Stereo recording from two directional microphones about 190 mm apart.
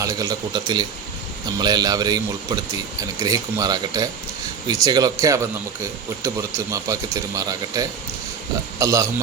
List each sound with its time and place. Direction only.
0.0 s a man's voice: 20° right (ahead or behind)